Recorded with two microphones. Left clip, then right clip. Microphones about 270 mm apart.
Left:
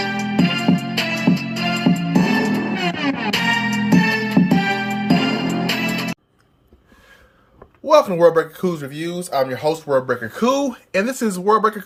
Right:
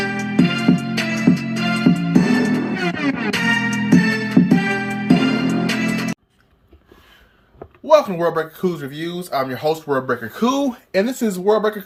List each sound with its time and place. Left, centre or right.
0.0 s music: right
7.9 s speech: centre